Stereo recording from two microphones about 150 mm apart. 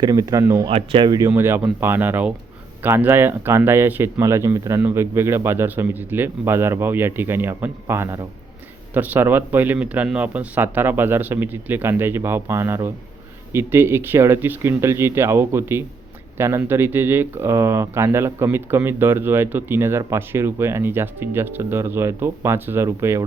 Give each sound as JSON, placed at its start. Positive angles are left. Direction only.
{"t": 0.0, "sound": "speech", "side_deg": -25}
{"t": 0.6, "sound": "speech", "side_deg": -40}
{"t": 1.3, "sound": "speech", "side_deg": -15}